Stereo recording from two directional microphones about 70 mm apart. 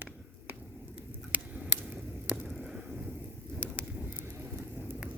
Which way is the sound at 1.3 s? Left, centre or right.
Right.